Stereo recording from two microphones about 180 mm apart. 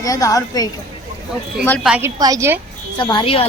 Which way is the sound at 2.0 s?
20° right (ahead or behind).